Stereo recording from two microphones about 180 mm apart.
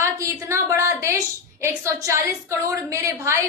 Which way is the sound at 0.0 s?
15° right (ahead or behind).